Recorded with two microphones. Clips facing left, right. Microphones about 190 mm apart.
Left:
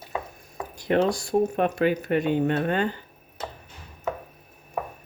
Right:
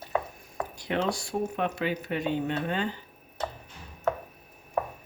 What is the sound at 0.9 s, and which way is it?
Speech, 45° left (ahead or behind).